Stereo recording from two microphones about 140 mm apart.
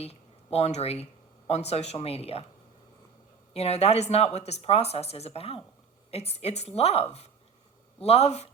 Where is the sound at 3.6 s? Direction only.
50° left (ahead or behind).